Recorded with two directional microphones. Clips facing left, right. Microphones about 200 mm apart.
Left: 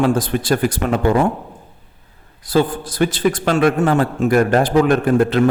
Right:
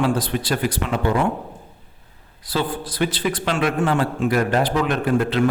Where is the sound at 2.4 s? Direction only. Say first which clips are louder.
Left 7 dB; 45° left (ahead or behind).